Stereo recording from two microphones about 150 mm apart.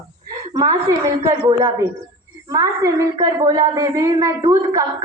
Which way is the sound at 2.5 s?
20° right (ahead or behind).